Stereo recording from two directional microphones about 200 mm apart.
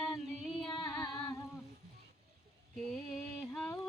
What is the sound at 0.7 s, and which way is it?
Female singing, 20° left (ahead or behind).